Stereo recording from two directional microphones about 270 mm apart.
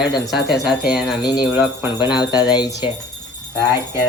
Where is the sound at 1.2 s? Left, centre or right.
Centre.